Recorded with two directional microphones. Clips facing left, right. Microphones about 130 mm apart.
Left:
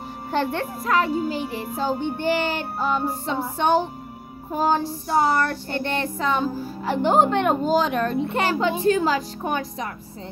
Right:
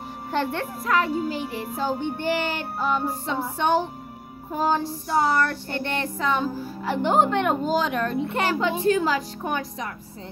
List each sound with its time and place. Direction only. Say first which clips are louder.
0.3 s a child's voice: left 2 dB; 30° left (ahead or behind)
4.5 s child singing: left 2 dB; 30° left (ahead or behind)